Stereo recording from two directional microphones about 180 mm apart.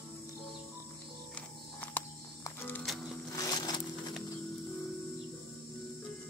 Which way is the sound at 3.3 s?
20° left (ahead or behind).